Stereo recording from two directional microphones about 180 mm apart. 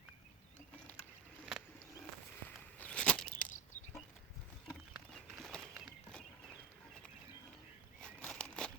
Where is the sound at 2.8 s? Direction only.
5° left (ahead or behind).